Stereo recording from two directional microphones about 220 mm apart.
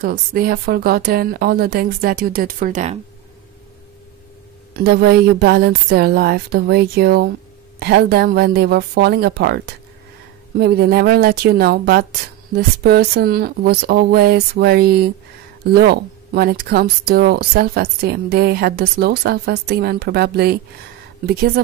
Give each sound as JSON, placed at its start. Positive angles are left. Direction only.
{"t": 0.0, "sound": "speech", "side_deg": -45}
{"t": 4.8, "sound": "speech", "side_deg": -45}